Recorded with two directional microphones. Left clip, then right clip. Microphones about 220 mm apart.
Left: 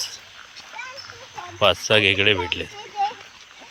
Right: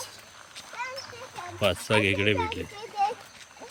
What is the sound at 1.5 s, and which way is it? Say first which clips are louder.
Speech: left 7 dB; 5° right (ahead or behind).